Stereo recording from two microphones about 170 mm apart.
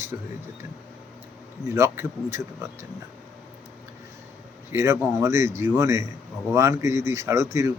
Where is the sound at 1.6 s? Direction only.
15° right (ahead or behind).